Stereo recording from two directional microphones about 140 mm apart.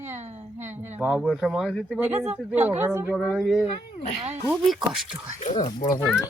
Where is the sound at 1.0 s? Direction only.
5° right (ahead or behind).